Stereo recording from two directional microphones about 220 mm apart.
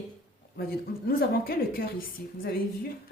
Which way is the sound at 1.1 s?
40° left (ahead or behind).